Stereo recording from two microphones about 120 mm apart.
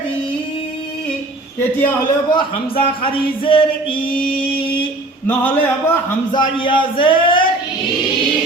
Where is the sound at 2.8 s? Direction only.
45° left (ahead or behind).